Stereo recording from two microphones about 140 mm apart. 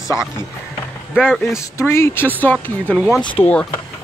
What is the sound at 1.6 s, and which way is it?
Speech, 20° left (ahead or behind).